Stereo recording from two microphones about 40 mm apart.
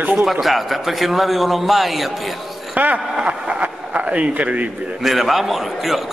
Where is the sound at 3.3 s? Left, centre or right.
Right.